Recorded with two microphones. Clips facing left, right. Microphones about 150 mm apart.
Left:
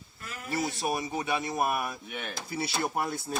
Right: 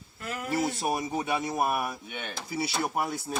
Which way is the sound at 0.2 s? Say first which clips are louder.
Right 7 dB; 65° right (ahead or behind).